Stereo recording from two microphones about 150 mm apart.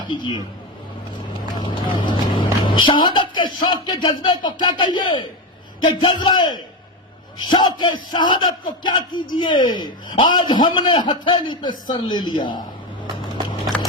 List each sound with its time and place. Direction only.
0.1 s a man's voice: 30° left (ahead or behind)
1.5 s vehicle: 35° left (ahead or behind)
2.6 s a man's voice: 35° left (ahead or behind)